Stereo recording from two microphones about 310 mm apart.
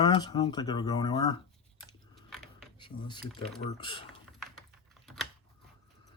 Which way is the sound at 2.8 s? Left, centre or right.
Centre.